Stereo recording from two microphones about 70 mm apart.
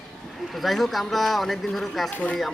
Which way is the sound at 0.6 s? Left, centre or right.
Centre.